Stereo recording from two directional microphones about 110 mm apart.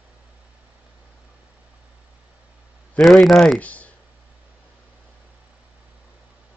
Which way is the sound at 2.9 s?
5° left (ahead or behind).